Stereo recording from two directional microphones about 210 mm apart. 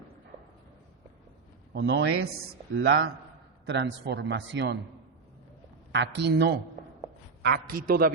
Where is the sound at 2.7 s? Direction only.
65° right (ahead or behind).